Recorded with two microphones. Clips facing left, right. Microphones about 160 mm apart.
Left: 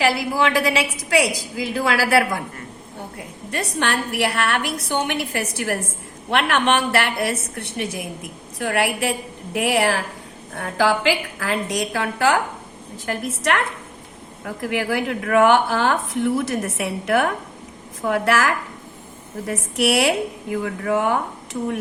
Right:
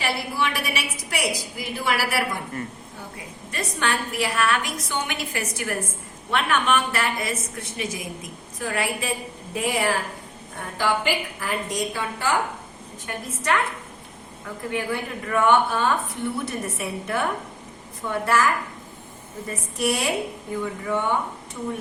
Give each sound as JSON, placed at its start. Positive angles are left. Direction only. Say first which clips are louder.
{"t": 0.0, "sound": "a woman's voice", "louder": "left 6 dB", "side_deg": 90}
{"t": 3.2, "sound": "a woman's voice", "louder": "left 4 dB", "side_deg": 65}
{"t": 6.3, "sound": "a woman's voice", "louder": "left 3 dB", "side_deg": 75}
{"t": 10.5, "sound": "a woman's voice", "louder": "left 5 dB", "side_deg": 85}